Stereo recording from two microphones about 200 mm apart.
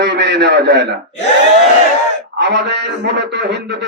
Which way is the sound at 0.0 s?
60° right (ahead or behind).